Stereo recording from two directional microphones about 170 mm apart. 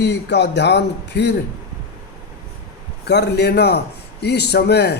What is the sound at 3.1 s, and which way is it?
A man's voice, 75° left (ahead or behind).